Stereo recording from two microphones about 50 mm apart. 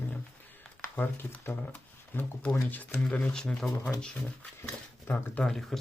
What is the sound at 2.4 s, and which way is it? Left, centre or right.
Speech, left.